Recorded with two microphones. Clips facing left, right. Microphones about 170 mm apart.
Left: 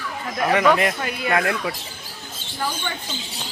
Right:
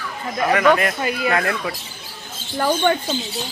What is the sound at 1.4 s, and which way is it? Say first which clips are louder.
Speech: even; 10° left (ahead or behind).